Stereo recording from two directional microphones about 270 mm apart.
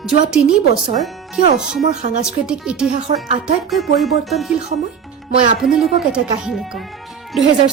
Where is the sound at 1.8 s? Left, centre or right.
Right.